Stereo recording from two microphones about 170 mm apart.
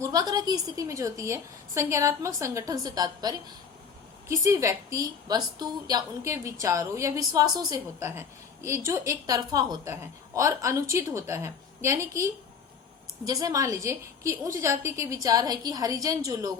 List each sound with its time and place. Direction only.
0.0 s a woman's voice: 20° right (ahead or behind)